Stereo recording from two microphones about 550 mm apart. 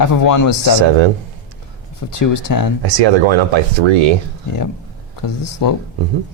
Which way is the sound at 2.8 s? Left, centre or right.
Right.